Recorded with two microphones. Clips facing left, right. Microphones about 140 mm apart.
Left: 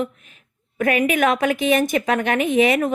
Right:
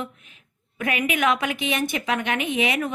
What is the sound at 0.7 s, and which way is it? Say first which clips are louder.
A woman's voice: left 6 dB; 45° left (ahead or behind).